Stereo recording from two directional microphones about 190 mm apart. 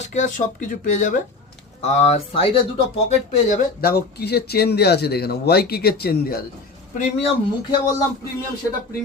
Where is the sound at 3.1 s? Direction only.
45° left (ahead or behind).